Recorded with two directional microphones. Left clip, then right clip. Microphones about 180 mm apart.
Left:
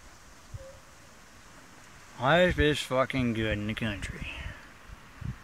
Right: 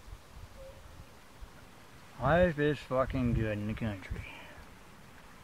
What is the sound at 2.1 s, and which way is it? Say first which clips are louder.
Speech: left 4 dB; 20° left (ahead or behind).